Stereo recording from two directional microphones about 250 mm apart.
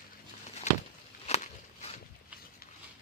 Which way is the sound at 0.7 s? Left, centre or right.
Left.